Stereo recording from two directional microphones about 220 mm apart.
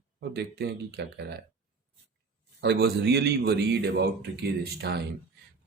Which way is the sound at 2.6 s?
50° right (ahead or behind).